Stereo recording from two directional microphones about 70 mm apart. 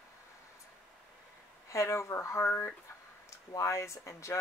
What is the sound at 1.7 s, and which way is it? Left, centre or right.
Speech, left.